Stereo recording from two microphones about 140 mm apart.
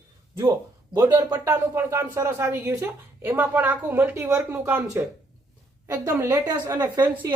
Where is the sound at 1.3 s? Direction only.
15° right (ahead or behind).